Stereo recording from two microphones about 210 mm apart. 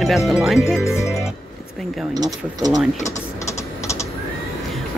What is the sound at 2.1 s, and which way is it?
Speech, 20° right (ahead or behind).